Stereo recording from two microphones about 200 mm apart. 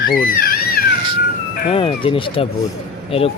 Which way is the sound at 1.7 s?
25° left (ahead or behind).